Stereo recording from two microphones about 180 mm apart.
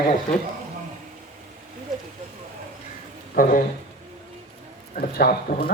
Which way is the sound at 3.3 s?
50° left (ahead or behind).